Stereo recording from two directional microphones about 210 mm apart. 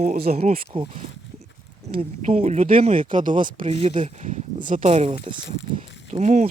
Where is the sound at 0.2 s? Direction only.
45° right (ahead or behind).